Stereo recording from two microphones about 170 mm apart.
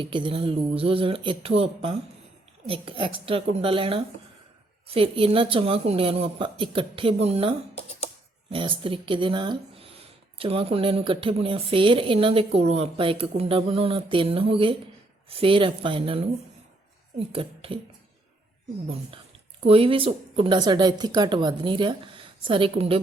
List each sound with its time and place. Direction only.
0.0 s speech: 30° right (ahead or behind)
19.6 s speech: 35° right (ahead or behind)